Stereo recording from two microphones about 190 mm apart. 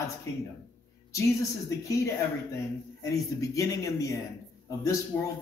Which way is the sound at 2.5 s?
15° left (ahead or behind).